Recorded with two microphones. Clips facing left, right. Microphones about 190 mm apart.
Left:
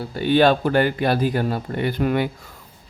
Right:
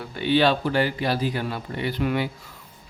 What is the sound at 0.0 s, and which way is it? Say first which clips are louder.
Speech: left 4 dB; 40° left (ahead or behind).